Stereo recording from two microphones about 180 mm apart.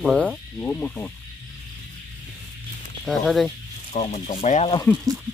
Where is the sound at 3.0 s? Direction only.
Centre (ahead or behind).